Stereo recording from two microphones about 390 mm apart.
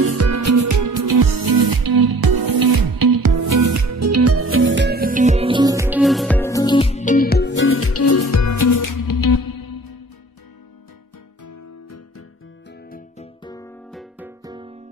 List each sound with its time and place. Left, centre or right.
0.0 s music: right; by 9.8 s left
12.9 s music: centre
13.9 s music: centre